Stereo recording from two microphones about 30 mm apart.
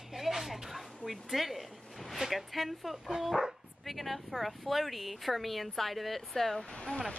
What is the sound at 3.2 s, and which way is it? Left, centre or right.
Speech, centre.